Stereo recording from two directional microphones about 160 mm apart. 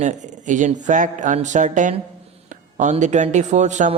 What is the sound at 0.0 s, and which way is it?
Speech, 50° right (ahead or behind).